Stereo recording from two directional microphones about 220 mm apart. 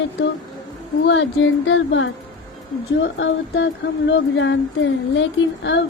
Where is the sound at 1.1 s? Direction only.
55° left (ahead or behind).